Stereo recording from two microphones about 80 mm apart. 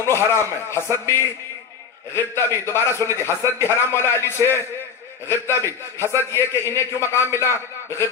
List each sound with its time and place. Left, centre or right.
0.1 s a man's voice: left